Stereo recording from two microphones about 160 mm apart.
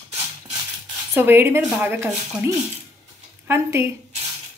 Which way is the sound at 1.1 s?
15° right (ahead or behind).